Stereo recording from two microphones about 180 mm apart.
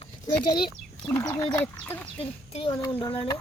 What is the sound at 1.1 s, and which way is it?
Speech, 15° left (ahead or behind).